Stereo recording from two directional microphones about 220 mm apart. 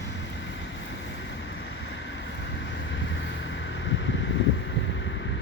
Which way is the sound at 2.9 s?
55° left (ahead or behind).